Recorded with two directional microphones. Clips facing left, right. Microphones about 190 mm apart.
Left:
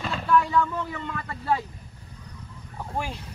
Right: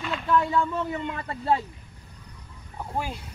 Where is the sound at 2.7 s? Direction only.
5° right (ahead or behind).